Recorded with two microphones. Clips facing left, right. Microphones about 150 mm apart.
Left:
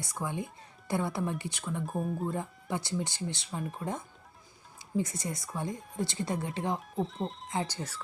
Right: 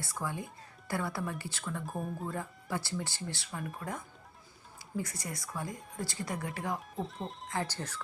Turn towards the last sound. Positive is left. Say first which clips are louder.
# left 2 dB
turn(degrees=10)  # may be behind; listen again after turning